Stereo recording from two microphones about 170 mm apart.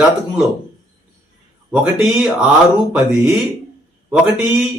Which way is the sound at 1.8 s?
5° right (ahead or behind).